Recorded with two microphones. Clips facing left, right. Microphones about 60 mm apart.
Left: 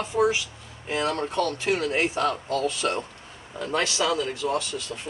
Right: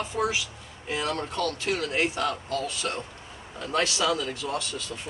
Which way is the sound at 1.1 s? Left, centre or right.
Left.